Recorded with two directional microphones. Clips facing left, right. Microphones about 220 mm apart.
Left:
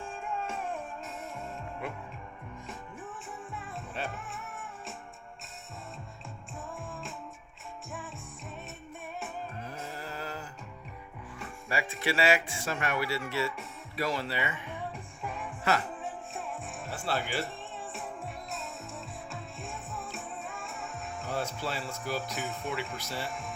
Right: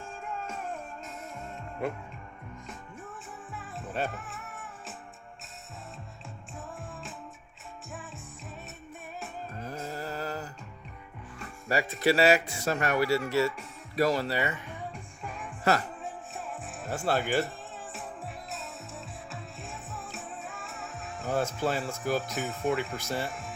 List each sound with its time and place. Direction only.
3.5 s music: centre (ahead or behind)
6.7 s music: centre (ahead or behind)
9.6 s a sound: 40° right (ahead or behind)
11.7 s speech: 40° right (ahead or behind)
16.0 s music: centre (ahead or behind)
16.9 s speech: 45° right (ahead or behind)
18.5 s music: centre (ahead or behind)
21.3 s speech: 45° right (ahead or behind)
22.2 s speech: centre (ahead or behind)
23.0 s speech: 45° right (ahead or behind)
23.3 s music: centre (ahead or behind)